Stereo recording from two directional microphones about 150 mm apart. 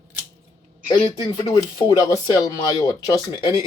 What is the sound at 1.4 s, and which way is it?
Speech, 25° left (ahead or behind).